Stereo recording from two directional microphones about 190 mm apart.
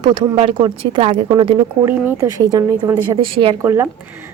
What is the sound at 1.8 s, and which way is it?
Speech, 10° right (ahead or behind).